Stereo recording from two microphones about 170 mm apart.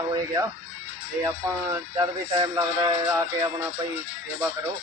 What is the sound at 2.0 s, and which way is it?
Speech, 25° right (ahead or behind).